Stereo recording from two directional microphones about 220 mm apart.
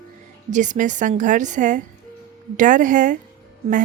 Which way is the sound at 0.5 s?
35° right (ahead or behind).